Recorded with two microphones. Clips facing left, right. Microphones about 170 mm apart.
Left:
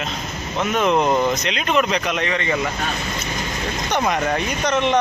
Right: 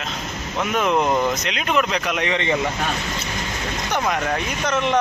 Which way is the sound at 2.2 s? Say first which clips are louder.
Right 1 dB; 20° right (ahead or behind).